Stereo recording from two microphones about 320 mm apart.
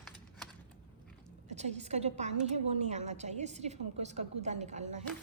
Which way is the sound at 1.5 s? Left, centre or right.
Right.